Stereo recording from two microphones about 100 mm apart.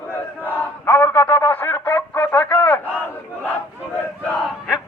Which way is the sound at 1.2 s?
15° left (ahead or behind).